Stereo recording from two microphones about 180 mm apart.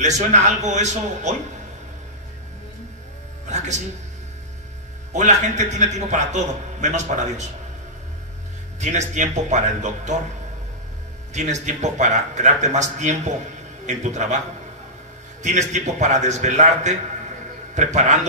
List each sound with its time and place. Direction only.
0.0 s a man's voice: 40° right (ahead or behind)
5.1 s a man's voice: 40° right (ahead or behind)
8.7 s a man's voice: 40° right (ahead or behind)
11.3 s a man's voice: 40° right (ahead or behind)
15.4 s a man's voice: 40° right (ahead or behind)